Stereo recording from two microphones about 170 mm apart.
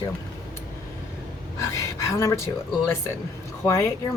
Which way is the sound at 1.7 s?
15° left (ahead or behind).